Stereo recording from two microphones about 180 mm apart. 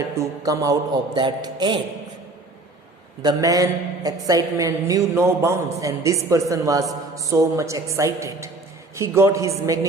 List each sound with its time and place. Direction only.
0.1 s a man's voice: 15° right (ahead or behind)
3.2 s a man's voice: 20° right (ahead or behind)